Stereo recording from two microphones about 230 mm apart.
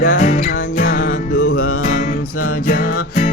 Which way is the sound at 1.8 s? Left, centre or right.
Left.